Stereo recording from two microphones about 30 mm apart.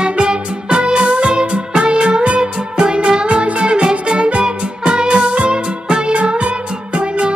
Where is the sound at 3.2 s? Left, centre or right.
Right.